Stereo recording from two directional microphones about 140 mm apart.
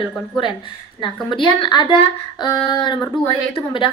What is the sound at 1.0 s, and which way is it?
A woman's voice, 35° left (ahead or behind).